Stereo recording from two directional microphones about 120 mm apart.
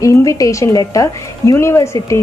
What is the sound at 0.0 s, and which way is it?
A woman's voice, 25° left (ahead or behind).